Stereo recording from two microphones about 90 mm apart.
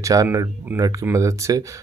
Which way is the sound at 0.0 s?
40° right (ahead or behind).